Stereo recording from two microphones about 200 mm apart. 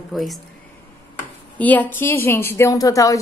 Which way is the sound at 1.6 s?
10° left (ahead or behind).